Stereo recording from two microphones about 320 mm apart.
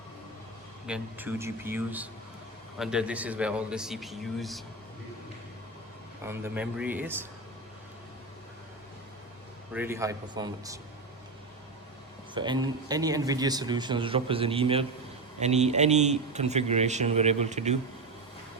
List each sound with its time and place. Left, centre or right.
0.9 s a man's voice: centre
6.2 s a man's voice: centre
9.7 s a man's voice: centre
12.3 s a man's voice: centre